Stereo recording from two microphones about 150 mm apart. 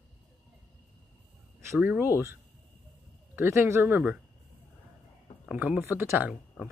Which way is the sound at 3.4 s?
20° right (ahead or behind).